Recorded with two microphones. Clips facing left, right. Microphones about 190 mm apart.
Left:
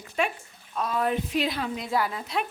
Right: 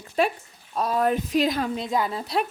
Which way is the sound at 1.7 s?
20° right (ahead or behind).